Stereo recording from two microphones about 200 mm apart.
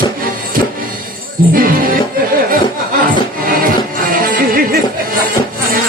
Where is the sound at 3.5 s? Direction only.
45° right (ahead or behind).